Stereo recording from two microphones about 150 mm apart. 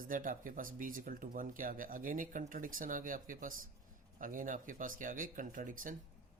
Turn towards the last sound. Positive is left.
turn(degrees=-60)  # may be behind; listen again after turning